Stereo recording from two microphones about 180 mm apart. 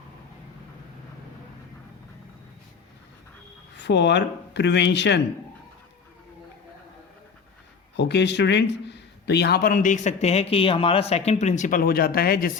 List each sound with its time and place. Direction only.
3.8 s speech: 70° left (ahead or behind)
7.9 s a man's voice: 70° left (ahead or behind); by 12.5 s 55° left (ahead or behind)